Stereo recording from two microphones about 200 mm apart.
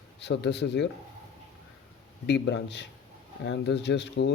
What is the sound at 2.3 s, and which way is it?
Speech, 60° left (ahead or behind).